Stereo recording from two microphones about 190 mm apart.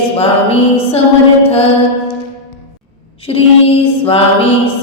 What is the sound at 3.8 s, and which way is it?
Speech, 30° left (ahead or behind).